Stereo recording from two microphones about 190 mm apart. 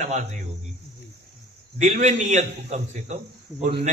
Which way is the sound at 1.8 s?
40° right (ahead or behind).